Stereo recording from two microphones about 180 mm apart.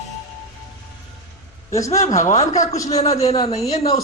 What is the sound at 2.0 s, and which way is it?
Speech, 40° left (ahead or behind).